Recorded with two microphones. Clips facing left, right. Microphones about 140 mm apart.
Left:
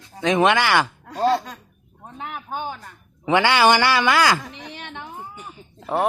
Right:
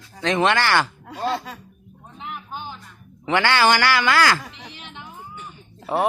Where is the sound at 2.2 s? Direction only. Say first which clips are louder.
Left 4 dB; 50° left (ahead or behind).